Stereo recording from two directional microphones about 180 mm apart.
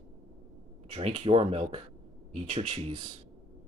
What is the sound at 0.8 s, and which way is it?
Speech, 35° right (ahead or behind).